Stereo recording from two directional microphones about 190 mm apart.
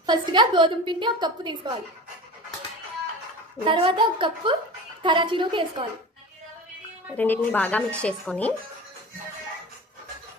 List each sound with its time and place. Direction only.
0.0 s a woman's voice: 25° right (ahead or behind)
3.6 s a woman's voice: 30° right (ahead or behind)
7.2 s a woman's voice: 10° left (ahead or behind)